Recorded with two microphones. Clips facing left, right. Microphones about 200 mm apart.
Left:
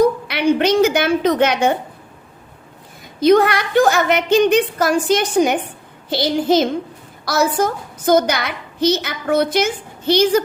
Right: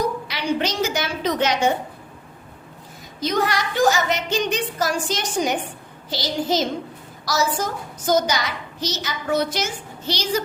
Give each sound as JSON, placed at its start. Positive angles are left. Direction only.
{"t": 0.3, "sound": "a woman's voice", "side_deg": 60}
{"t": 3.2, "sound": "a woman's voice", "side_deg": 60}